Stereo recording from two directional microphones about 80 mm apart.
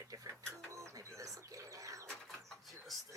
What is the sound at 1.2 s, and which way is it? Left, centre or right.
Bird, right.